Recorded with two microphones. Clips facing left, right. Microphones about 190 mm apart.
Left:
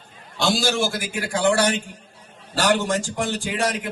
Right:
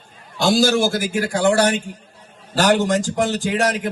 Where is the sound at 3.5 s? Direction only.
50° right (ahead or behind).